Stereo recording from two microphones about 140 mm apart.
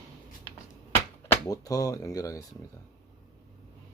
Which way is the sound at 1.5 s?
25° left (ahead or behind).